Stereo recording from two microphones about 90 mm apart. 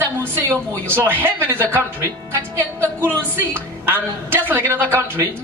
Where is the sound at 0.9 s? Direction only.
25° right (ahead or behind).